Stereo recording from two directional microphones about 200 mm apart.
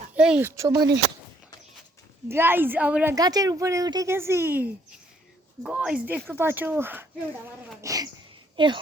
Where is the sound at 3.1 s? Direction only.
20° right (ahead or behind).